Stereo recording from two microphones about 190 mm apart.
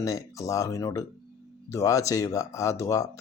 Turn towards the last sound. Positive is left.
turn(degrees=15)  # may be behind; listen again after turning